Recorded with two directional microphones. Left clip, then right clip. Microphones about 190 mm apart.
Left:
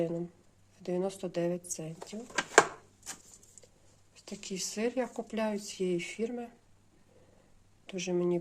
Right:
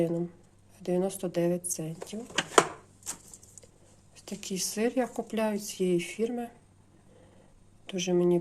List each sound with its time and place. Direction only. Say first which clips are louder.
0.0 s a woman's voice: right 4 dB; 5° left (ahead or behind)
4.1 s a woman's voice: right 4 dB; centre (ahead or behind)
7.9 s a woman's voice: right 5 dB; centre (ahead or behind)